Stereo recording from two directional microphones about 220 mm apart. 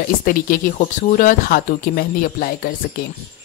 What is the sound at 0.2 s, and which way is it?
Speech, 40° left (ahead or behind).